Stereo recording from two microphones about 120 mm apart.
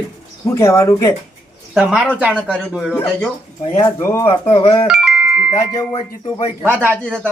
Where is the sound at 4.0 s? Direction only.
20° left (ahead or behind).